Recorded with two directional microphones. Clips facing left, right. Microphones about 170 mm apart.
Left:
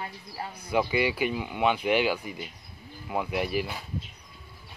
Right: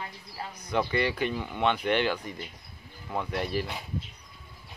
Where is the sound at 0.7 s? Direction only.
10° left (ahead or behind).